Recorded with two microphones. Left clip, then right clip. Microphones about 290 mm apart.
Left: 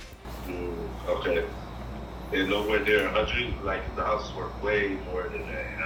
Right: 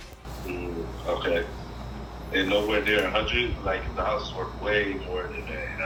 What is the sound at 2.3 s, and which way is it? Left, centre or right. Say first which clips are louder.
Speech: right 2 dB; right.